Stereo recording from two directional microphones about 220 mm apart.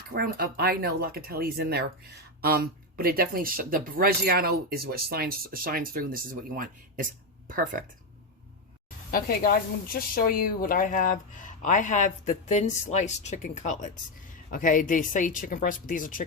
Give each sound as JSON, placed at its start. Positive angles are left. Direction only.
{"t": 0.1, "sound": "speech", "side_deg": -45}
{"t": 9.1, "sound": "speech", "side_deg": 40}